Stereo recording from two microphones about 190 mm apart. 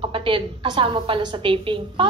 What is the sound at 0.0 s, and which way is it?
A woman's voice, 25° right (ahead or behind).